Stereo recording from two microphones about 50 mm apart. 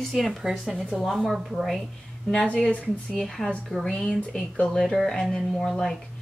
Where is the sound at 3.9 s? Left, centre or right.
Centre.